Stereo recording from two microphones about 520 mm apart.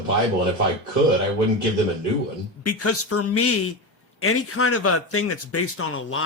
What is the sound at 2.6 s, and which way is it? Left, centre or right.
A man's voice, left.